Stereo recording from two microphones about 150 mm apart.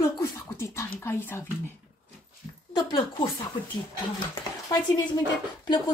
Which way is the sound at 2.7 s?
30° left (ahead or behind).